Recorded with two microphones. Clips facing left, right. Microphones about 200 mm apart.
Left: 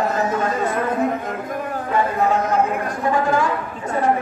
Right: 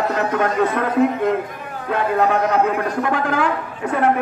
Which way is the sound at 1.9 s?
70° right (ahead or behind).